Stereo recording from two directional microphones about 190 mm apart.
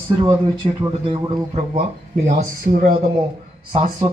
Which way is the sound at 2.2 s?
45° right (ahead or behind).